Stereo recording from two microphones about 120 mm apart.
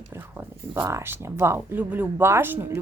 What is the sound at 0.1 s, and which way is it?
Speech, 20° right (ahead or behind).